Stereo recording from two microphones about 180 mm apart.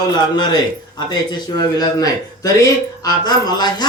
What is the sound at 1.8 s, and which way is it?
Speech, 20° left (ahead or behind).